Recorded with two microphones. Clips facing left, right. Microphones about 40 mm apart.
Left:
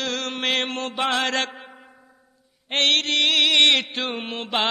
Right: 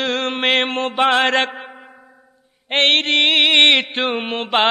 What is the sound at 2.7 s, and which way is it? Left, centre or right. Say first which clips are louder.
Mantra: right 5 dB; right.